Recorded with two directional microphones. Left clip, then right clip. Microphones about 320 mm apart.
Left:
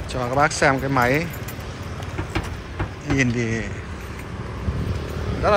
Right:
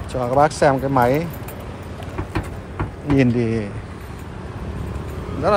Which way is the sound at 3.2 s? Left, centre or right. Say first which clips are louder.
Right 3 dB; centre.